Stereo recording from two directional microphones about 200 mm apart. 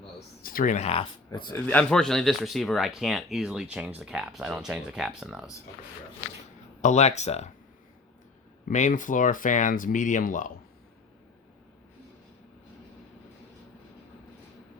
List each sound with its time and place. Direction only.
0.4 s speech: 45° left (ahead or behind); by 1.5 s 25° left (ahead or behind)
1.5 s speech: 10° left (ahead or behind)
6.8 s speech: 35° left (ahead or behind)
8.6 s speech: 40° left (ahead or behind)